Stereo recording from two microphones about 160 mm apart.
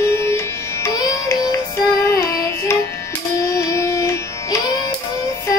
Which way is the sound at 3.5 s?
20° left (ahead or behind).